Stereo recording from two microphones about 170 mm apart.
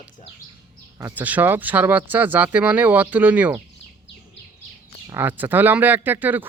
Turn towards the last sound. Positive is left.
turn(degrees=-10)  # may be behind; listen again after turning